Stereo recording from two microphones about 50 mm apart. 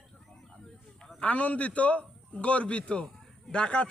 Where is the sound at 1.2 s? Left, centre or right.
Left.